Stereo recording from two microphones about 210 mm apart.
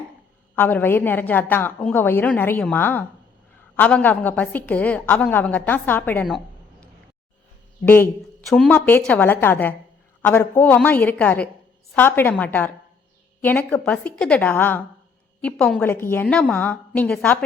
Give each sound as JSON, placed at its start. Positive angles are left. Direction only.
{"t": 0.5, "sound": "a woman's voice", "side_deg": 10}
{"t": 7.9, "sound": "a woman's voice", "side_deg": 10}